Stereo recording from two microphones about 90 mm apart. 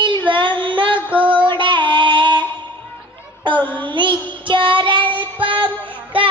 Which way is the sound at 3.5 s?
20° left (ahead or behind).